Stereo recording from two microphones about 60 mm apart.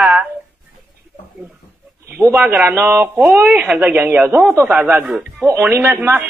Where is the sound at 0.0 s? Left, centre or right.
Centre.